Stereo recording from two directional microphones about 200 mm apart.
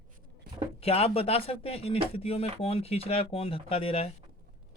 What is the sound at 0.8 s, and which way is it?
Speech, 30° left (ahead or behind).